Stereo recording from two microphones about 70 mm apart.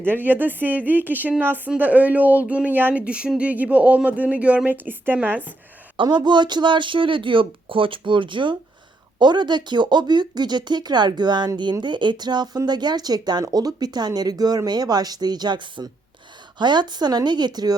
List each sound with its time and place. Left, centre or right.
0.0 s speech: right
6.1 s speech: right
9.1 s speech: right